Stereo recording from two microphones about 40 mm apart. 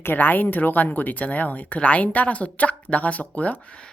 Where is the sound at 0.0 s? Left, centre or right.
Left.